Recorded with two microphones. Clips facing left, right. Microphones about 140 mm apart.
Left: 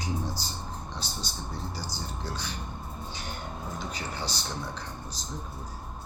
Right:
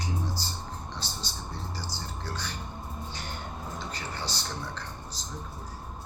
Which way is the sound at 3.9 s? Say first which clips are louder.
Left 1 dB; 15° left (ahead or behind).